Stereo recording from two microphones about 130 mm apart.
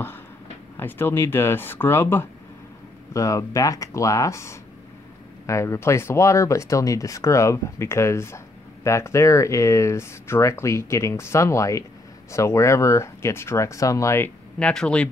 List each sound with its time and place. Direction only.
0.7 s speech: 15° left (ahead or behind)